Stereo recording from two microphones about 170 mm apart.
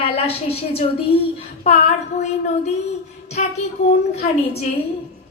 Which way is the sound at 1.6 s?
45° left (ahead or behind).